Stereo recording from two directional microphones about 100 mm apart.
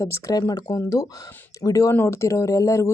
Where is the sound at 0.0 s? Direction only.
30° left (ahead or behind).